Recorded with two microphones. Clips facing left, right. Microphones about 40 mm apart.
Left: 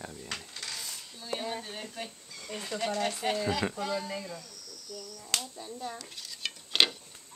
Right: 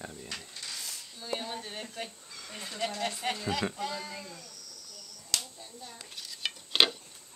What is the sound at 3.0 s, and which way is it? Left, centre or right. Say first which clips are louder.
Speech: left 3 dB; centre.